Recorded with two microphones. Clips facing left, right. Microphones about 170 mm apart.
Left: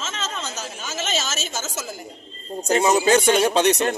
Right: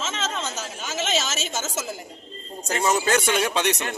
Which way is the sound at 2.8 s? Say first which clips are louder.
Left 4 dB; 15° left (ahead or behind).